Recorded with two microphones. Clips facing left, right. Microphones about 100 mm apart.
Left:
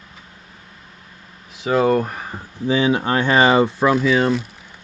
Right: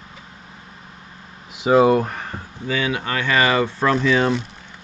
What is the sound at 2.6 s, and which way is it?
Speech, 25° left (ahead or behind).